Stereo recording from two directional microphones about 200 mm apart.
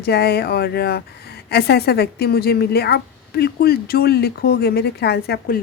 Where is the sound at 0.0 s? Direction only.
55° left (ahead or behind).